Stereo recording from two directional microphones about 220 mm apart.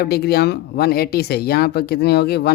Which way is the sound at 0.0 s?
45° left (ahead or behind).